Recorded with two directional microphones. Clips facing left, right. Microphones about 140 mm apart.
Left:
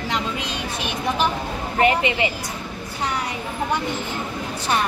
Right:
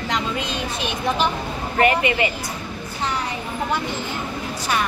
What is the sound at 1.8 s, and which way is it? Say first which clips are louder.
Speech: right 1 dB; 20° left (ahead or behind).